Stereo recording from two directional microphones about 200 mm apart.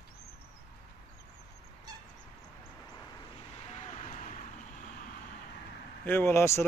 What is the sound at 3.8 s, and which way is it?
Vehicle, 35° left (ahead or behind).